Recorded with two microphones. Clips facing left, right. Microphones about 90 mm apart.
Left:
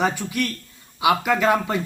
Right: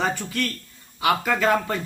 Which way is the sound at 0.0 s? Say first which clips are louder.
Left 2 dB; 10° left (ahead or behind).